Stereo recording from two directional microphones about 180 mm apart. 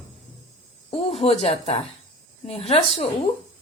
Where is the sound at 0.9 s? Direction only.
35° left (ahead or behind).